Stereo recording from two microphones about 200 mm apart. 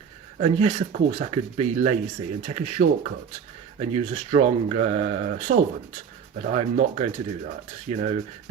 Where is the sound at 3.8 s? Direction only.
30° right (ahead or behind).